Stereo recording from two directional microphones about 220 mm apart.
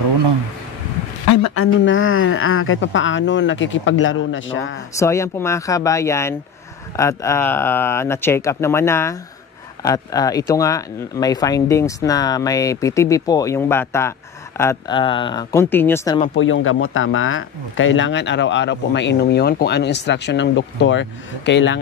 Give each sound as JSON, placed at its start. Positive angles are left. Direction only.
{"t": 1.5, "sound": "speech", "side_deg": 70}
{"t": 4.9, "sound": "speech", "side_deg": 15}
{"t": 16.3, "sound": "speech", "side_deg": 65}